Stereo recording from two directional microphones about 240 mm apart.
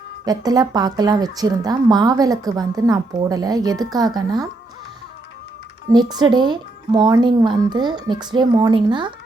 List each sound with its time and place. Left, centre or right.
0.3 s speech: centre
5.9 s speech: centre